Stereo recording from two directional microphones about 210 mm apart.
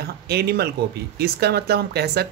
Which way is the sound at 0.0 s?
50° right (ahead or behind).